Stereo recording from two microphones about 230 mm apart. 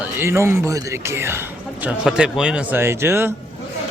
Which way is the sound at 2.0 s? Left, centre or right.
Centre.